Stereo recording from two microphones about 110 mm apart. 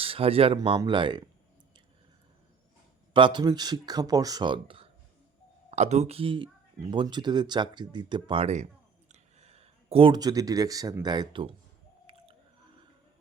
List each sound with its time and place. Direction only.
0.0 s speech: 60° right (ahead or behind)
3.1 s speech: 45° right (ahead or behind)
5.7 s speech: 85° right; by 8.4 s 50° right (ahead or behind)
8.4 s a sound: 90° right; by 10.1 s 65° right (ahead or behind)
10.1 s speech: 35° right (ahead or behind)
12.1 s chewing: 60° right (ahead or behind)